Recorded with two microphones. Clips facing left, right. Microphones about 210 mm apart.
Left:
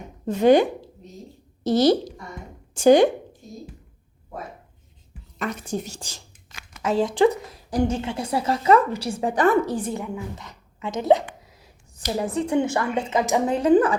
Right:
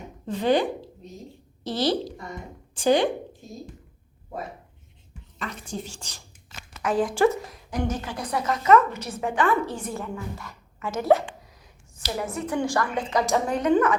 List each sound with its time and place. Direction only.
0.3 s a woman's voice: 45° left (ahead or behind)
5.4 s a woman's voice: 45° left (ahead or behind)
6.8 s a woman's voice: 25° left (ahead or behind)
9.9 s a woman's voice: 20° left (ahead or behind)
12.1 s a woman's voice: 30° left (ahead or behind)